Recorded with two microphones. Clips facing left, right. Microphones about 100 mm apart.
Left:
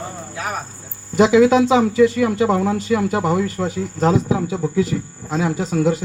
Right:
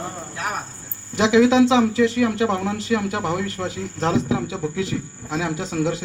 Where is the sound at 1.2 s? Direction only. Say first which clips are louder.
Left 3 dB; 5° left (ahead or behind).